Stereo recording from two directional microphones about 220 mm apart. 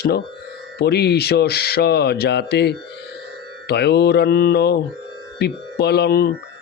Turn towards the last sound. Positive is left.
turn(degrees=45)  # may be behind; listen again after turning